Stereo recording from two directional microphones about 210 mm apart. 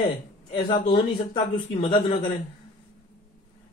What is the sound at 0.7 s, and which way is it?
Speech, 20° left (ahead or behind).